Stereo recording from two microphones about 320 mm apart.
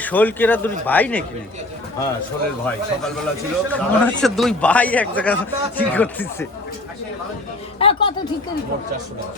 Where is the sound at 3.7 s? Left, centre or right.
Centre.